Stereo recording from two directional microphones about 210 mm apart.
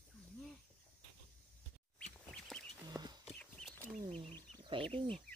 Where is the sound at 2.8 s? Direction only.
20° right (ahead or behind).